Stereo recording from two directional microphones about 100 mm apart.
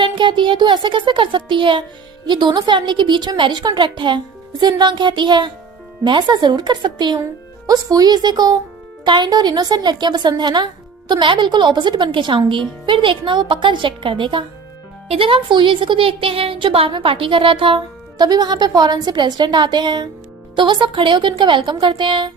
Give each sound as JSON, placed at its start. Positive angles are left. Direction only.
{"t": 0.0, "sound": "a woman's voice", "side_deg": -55}